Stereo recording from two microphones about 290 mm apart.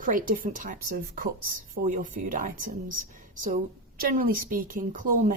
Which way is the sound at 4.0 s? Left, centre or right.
Right.